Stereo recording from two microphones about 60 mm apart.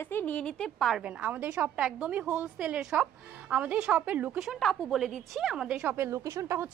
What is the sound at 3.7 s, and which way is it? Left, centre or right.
Speech, centre.